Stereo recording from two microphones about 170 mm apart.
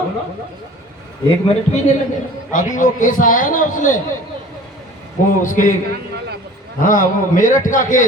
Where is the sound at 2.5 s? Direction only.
50° left (ahead or behind).